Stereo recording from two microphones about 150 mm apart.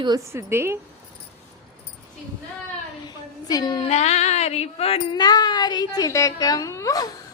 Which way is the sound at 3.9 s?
50° left (ahead or behind).